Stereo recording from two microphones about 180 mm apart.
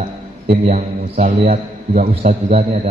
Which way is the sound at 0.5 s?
35° right (ahead or behind).